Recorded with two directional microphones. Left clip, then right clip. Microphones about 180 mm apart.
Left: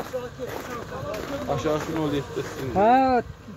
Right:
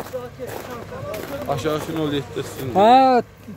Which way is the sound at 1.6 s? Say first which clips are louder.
Right 1 dB; 65° right (ahead or behind).